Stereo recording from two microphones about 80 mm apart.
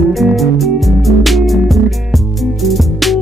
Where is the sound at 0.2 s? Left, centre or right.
Centre.